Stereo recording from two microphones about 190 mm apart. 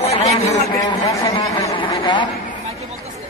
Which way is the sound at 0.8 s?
15° left (ahead or behind).